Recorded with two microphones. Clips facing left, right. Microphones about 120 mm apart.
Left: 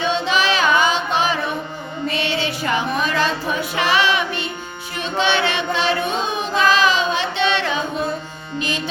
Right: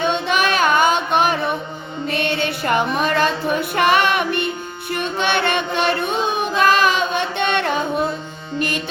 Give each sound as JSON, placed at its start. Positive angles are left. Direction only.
{"t": 0.0, "sound": "music", "side_deg": -55}